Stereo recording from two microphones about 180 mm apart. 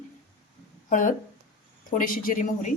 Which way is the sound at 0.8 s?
45° left (ahead or behind).